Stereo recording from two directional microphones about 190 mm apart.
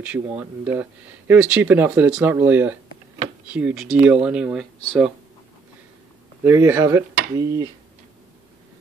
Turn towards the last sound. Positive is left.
turn(degrees=-20)  # may be behind; listen again after turning